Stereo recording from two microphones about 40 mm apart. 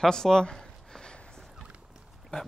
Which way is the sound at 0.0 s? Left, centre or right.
Centre.